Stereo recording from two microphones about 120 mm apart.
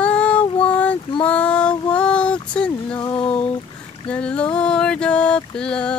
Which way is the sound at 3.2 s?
45° left (ahead or behind).